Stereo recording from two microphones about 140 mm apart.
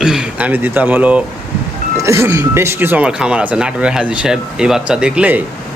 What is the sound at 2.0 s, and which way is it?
Speech, 20° right (ahead or behind).